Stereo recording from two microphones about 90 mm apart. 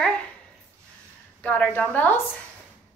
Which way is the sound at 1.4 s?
20° left (ahead or behind).